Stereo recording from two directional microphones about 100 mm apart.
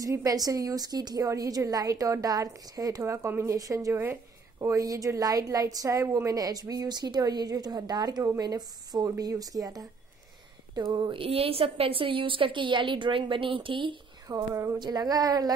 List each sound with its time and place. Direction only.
0.0 s a woman's voice: 35° right (ahead or behind)
11.1 s a woman's voice: 70° right (ahead or behind)
14.2 s a woman's voice: 35° right (ahead or behind)
14.8 s a woman's voice: 40° right (ahead or behind)